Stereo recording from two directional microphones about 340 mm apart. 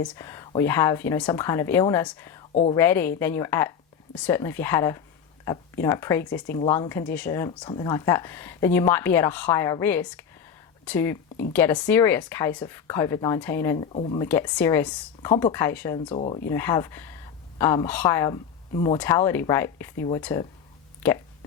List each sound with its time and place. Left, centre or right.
0.0 s speech: centre
2.5 s a woman's voice: centre
2.7 s speech: centre
14.3 s speech: centre